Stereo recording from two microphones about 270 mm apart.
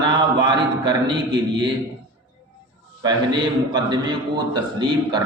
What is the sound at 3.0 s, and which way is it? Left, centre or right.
A man's voice, centre.